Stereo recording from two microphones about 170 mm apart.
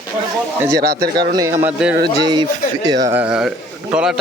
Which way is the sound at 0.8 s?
65° right (ahead or behind).